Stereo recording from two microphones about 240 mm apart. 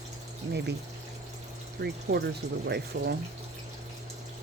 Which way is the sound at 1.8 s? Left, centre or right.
Right.